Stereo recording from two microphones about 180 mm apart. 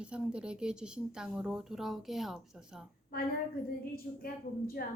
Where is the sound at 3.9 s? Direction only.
55° left (ahead or behind).